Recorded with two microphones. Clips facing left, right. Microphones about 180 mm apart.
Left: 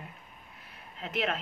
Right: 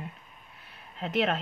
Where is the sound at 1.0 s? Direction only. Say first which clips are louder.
Right 5 dB; 35° right (ahead or behind).